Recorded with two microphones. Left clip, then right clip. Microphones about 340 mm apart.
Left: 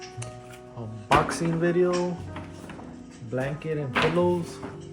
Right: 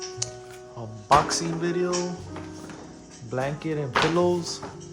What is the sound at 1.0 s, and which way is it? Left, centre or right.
Speech, centre.